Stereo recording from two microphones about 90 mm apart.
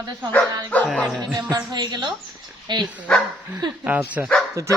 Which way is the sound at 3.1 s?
10° left (ahead or behind).